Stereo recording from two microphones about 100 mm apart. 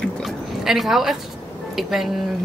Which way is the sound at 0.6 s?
5° right (ahead or behind).